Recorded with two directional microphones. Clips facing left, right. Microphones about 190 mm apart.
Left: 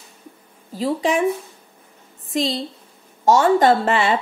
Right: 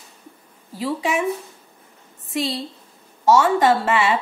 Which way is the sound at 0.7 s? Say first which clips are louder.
Left 3 dB; 30° left (ahead or behind).